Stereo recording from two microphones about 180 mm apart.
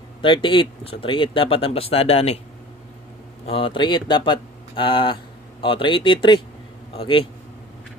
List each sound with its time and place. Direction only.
0.2 s speech: 25° left (ahead or behind)
3.4 s speech: 30° left (ahead or behind)